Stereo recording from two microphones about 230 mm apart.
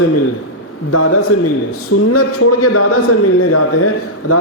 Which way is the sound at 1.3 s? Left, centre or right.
Left.